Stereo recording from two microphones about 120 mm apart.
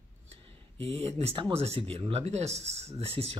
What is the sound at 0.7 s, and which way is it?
Speech, 55° right (ahead or behind).